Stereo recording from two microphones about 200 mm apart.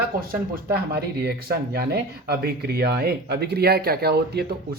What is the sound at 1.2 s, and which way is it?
Speech, 50° right (ahead or behind).